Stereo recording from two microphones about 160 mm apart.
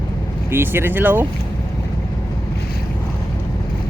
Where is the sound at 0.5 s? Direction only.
15° right (ahead or behind).